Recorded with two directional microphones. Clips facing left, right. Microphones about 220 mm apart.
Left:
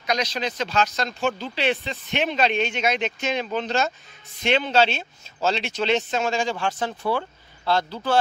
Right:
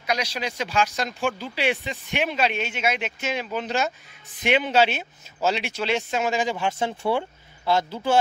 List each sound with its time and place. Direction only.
0.0 s speech: 10° right (ahead or behind)